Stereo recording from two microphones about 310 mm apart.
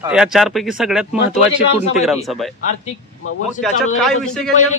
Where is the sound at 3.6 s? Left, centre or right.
Centre.